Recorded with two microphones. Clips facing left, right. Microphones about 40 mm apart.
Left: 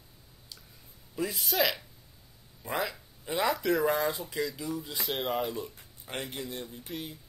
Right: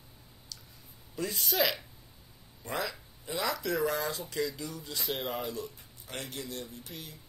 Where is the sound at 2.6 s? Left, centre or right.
Centre.